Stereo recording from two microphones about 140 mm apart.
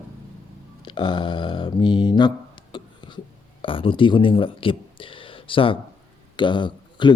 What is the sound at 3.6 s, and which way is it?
A man's voice, 40° left (ahead or behind).